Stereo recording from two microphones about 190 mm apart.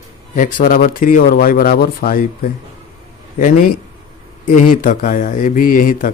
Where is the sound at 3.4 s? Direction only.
45° left (ahead or behind).